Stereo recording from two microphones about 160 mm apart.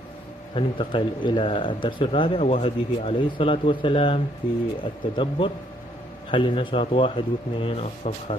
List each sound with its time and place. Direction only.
0.6 s speech: 30° left (ahead or behind)